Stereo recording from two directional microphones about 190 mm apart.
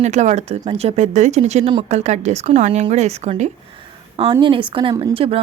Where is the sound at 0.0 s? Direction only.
35° right (ahead or behind).